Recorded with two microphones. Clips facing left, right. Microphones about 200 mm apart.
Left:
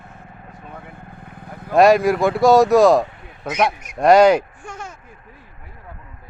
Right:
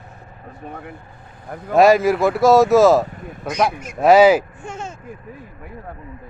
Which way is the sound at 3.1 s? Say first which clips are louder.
Right 8 dB; 45° right (ahead or behind).